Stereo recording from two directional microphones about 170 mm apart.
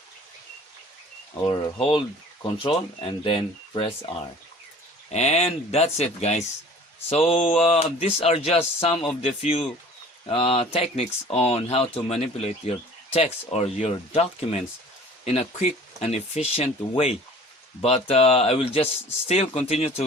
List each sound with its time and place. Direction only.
1.5 s speech: 30° left (ahead or behind)
5.1 s speech: 40° left (ahead or behind)